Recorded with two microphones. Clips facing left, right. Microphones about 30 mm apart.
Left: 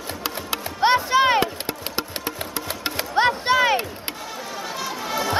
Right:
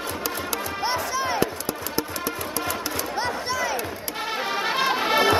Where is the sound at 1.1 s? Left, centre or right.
Left.